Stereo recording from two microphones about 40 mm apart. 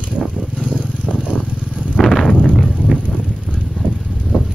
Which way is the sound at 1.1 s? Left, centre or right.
Left.